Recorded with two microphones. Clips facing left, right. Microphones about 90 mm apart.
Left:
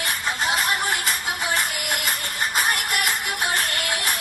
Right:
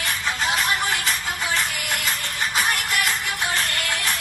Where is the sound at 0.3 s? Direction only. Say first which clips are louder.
Even; 5° left (ahead or behind).